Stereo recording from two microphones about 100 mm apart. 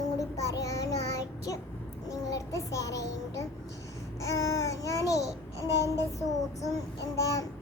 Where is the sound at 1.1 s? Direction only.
35° left (ahead or behind).